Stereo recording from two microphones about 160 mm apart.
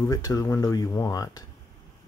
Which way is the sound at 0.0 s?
20° left (ahead or behind).